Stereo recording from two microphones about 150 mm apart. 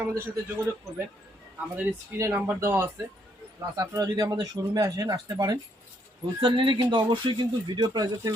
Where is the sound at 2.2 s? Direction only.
20° right (ahead or behind).